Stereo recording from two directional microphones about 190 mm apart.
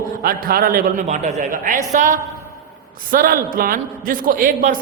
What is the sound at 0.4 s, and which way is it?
Speech, 50° right (ahead or behind).